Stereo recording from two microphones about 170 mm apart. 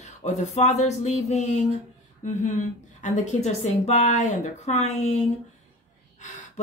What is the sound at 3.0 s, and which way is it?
Speech, 40° left (ahead or behind).